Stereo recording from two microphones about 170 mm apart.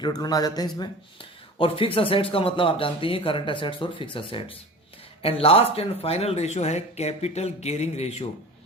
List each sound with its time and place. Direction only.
0.0 s speech: 25° left (ahead or behind); by 8.3 s 40° left (ahead or behind)